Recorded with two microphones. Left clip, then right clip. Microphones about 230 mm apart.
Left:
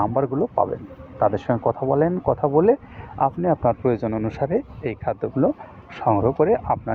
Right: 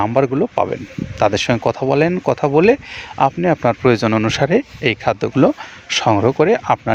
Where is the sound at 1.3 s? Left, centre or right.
Right.